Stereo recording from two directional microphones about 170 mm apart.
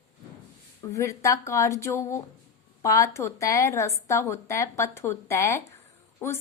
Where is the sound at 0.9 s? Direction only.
20° left (ahead or behind).